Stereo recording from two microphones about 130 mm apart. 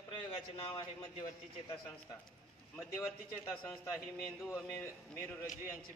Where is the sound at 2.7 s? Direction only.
20° left (ahead or behind).